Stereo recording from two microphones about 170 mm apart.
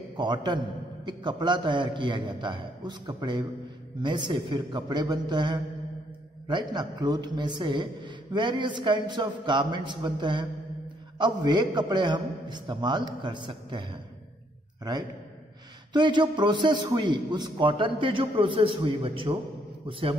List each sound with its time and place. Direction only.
0.2 s a man's voice: 25° right (ahead or behind)
15.9 s a man's voice: 25° right (ahead or behind)